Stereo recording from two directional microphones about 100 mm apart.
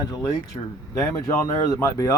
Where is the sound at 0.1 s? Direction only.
35° left (ahead or behind).